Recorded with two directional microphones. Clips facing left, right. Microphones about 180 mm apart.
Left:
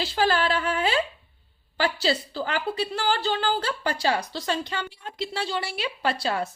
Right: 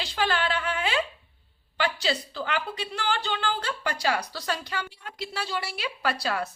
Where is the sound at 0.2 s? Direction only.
35° left (ahead or behind).